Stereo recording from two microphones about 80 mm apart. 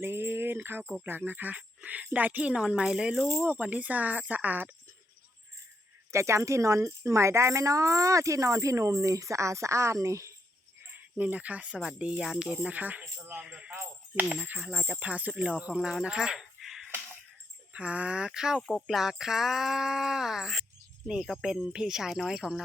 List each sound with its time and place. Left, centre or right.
0.0 s music: right
1.0 s speech: right; by 3.2 s centre
3.5 s speech: centre
6.1 s speech: right
11.2 s speech: centre
12.5 s speech: centre
13.7 s speech: right; by 16.9 s centre
17.7 s speech: centre